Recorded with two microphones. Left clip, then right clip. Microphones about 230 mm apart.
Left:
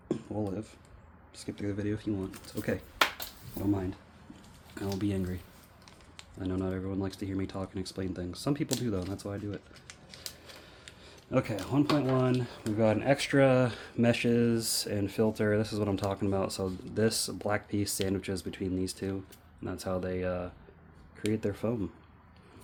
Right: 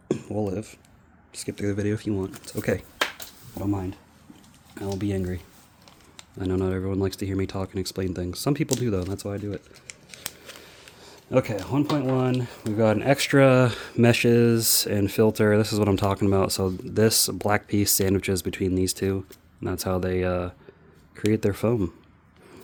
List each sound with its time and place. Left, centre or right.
0.1 s speech: right
3.6 s speech: right
6.4 s speech: right
11.0 s speech: right